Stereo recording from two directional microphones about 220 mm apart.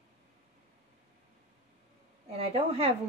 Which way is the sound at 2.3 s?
25° right (ahead or behind).